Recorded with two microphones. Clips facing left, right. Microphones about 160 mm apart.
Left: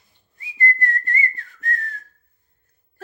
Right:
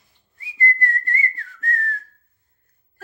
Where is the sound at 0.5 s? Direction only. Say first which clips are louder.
Even; 20° left (ahead or behind).